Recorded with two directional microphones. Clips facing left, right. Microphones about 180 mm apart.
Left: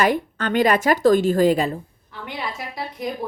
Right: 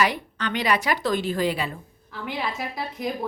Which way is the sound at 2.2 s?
Centre (ahead or behind).